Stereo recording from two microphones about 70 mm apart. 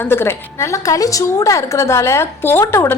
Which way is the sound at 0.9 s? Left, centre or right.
Left.